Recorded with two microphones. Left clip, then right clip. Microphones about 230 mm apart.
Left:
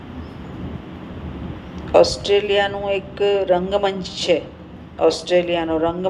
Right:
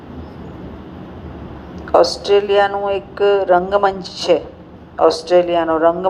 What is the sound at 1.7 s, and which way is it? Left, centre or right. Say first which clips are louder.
A man's voice: right 1 dB; right.